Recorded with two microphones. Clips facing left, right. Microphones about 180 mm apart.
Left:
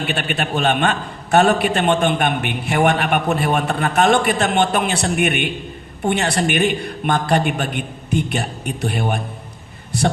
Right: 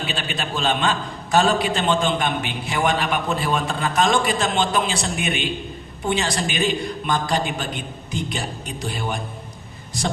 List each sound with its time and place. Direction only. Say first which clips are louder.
0.0 s a man's voice: left 5 dB; 60° left (ahead or behind)